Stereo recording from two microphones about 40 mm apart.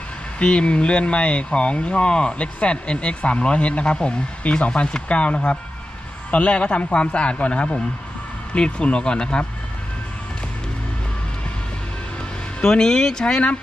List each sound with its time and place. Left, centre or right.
0.3 s speech: left
12.6 s speech: centre